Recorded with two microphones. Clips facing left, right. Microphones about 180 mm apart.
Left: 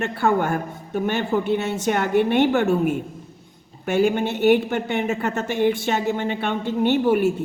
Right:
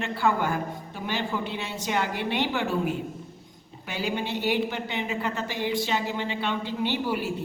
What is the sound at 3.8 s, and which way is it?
A woman's voice, 50° left (ahead or behind).